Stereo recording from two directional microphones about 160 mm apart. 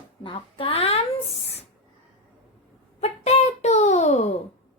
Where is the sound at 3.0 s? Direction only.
45° left (ahead or behind).